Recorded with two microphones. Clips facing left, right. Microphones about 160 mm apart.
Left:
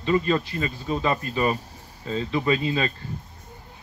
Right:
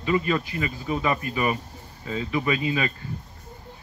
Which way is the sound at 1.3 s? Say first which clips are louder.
Left 2 dB; 30° left (ahead or behind).